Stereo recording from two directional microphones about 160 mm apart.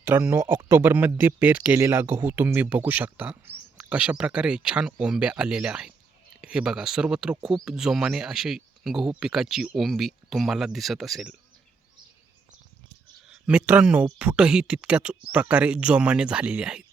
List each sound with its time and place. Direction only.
0.0 s speech: 15° right (ahead or behind)
13.2 s speech: 5° right (ahead or behind)